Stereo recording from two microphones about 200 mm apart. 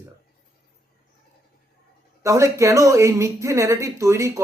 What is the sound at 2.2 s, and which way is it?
Speech, 15° right (ahead or behind).